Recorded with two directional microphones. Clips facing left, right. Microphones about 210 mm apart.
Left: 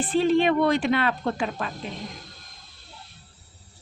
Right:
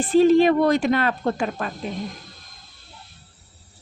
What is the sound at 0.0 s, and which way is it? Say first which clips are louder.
Speech: right 6 dB; 40° right (ahead or behind).